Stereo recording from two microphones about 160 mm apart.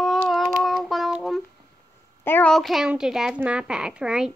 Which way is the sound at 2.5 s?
Centre (ahead or behind).